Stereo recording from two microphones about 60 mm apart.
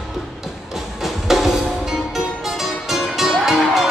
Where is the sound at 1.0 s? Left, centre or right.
Centre.